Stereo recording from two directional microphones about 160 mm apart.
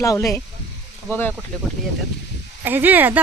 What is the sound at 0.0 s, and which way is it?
Speech, 20° left (ahead or behind).